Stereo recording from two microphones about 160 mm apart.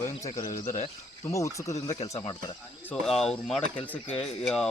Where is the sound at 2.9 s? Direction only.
5° left (ahead or behind).